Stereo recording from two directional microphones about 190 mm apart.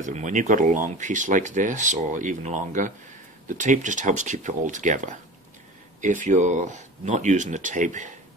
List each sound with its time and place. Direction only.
0.0 s speech: 40° right (ahead or behind)